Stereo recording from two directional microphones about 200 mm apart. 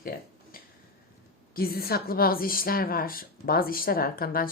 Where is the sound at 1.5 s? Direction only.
50° left (ahead or behind).